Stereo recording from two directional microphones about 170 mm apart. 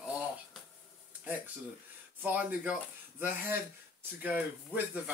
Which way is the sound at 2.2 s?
10° right (ahead or behind).